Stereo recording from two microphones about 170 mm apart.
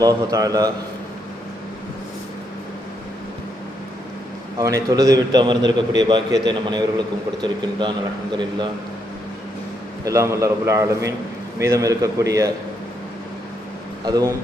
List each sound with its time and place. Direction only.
0.0 s a man's voice: 20° right (ahead or behind)
4.5 s a man's voice: 20° right (ahead or behind)
10.0 s a man's voice: 20° right (ahead or behind)
14.0 s a man's voice: 20° right (ahead or behind)